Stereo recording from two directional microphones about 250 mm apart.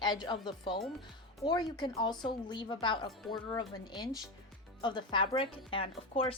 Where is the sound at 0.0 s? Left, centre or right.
Centre.